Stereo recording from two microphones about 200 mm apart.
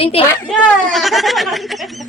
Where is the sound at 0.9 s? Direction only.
Centre (ahead or behind).